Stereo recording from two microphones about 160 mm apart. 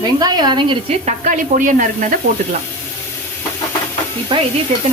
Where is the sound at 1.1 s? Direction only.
55° right (ahead or behind).